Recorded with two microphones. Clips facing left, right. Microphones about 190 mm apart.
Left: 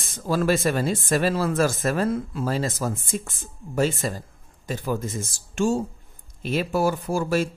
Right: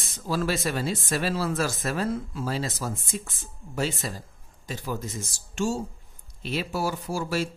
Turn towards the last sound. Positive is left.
turn(degrees=50)  # may be behind; listen again after turning